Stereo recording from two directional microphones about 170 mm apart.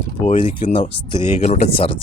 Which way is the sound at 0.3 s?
35° left (ahead or behind).